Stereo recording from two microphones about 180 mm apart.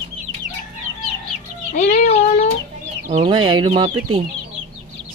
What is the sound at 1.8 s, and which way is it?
Cat, 60° left (ahead or behind).